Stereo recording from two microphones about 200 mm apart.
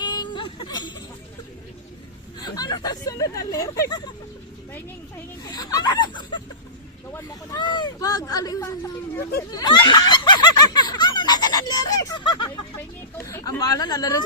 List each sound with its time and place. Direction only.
0.0 s a sound: 20° left (ahead or behind)
2.4 s speech: 20° left (ahead or behind)
5.5 s speech: 20° left (ahead or behind)
9.5 s snicker: 20° left (ahead or behind)
13.1 s speech: 15° left (ahead or behind)